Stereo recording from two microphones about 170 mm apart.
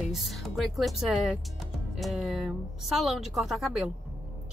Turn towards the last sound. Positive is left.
turn(degrees=0)  # may be behind; listen again after turning